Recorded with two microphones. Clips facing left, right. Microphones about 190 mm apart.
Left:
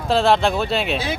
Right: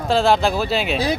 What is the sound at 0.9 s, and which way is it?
Speech, 40° right (ahead or behind).